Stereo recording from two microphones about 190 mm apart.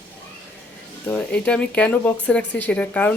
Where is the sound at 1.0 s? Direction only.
10° left (ahead or behind).